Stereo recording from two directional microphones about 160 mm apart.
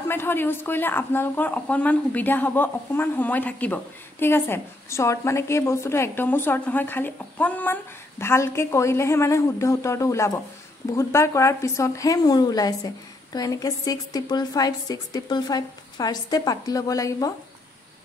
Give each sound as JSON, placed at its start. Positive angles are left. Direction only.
{"t": 0.1, "sound": "a woman's voice", "side_deg": 15}